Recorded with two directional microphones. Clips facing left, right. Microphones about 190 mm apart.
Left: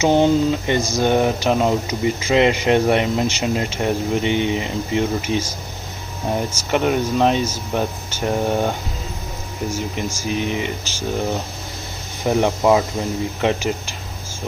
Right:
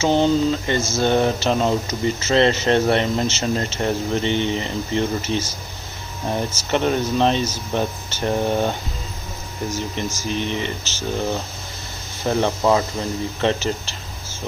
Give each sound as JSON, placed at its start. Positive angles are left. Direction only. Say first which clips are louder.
{"t": 0.0, "sound": "speech", "louder": "left 2 dB", "side_deg": 15}
{"t": 12.2, "sound": "speech", "louder": "left 2 dB", "side_deg": 10}